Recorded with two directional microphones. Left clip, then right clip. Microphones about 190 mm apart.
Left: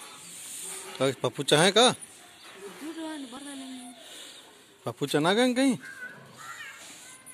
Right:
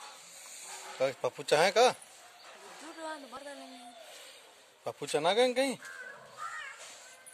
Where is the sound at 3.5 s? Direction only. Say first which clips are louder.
Left 5 dB; centre (ahead or behind).